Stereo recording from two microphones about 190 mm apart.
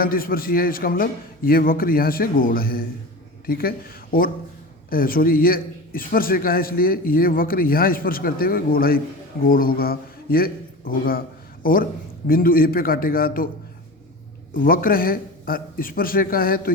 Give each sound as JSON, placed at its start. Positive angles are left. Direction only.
{"t": 0.0, "sound": "a man's voice", "side_deg": 50}
{"t": 14.5, "sound": "a man's voice", "side_deg": 50}